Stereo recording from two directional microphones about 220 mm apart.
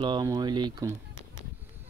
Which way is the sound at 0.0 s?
20° right (ahead or behind).